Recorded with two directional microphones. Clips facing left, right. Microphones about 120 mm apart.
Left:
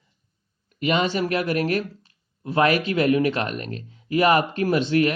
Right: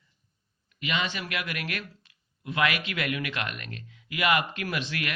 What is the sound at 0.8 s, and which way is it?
Speech, 40° left (ahead or behind).